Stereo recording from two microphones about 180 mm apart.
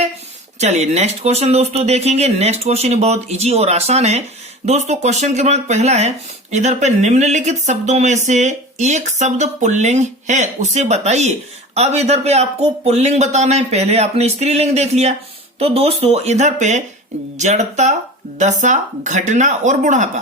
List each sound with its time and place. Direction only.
0.6 s speech: 40° right (ahead or behind)